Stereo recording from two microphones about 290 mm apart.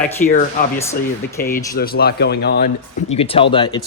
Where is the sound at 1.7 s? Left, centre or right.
Left.